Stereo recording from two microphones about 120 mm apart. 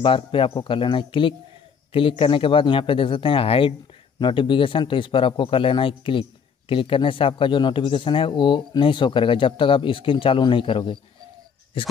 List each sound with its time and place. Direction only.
0.0 s a man's voice: 45° left (ahead or behind)